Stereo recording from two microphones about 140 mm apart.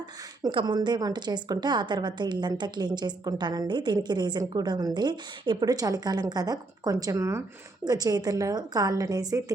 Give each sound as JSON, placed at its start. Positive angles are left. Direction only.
{"t": 0.4, "sound": "a woman's voice", "side_deg": -30}